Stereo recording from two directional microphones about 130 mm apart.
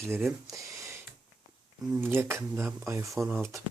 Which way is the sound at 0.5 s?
20° right (ahead or behind).